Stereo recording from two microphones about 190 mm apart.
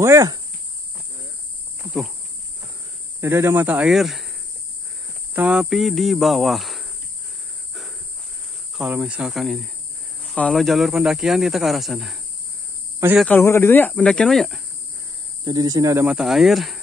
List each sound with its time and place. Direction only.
0.0 s speech: 15° right (ahead or behind)
3.2 s speech: 15° right (ahead or behind)
5.3 s speech: 5° right (ahead or behind)
8.7 s speech: 5° right (ahead or behind)
13.2 s speech: 10° left (ahead or behind)
15.4 s speech: 20° right (ahead or behind)
16.1 s speech: centre (ahead or behind)